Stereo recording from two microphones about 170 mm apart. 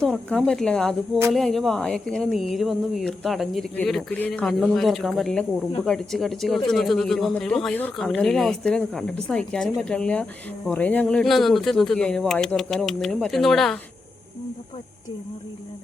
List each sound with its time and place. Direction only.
0.0 s speech: 5° left (ahead or behind)